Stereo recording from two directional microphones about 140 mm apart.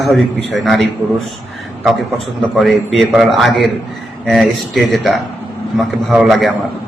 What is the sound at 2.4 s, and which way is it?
A man's voice, centre (ahead or behind).